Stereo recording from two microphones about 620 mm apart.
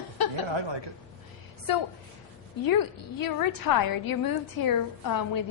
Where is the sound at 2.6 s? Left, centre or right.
Left.